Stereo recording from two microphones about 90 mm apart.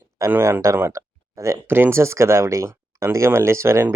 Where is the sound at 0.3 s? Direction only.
25° right (ahead or behind).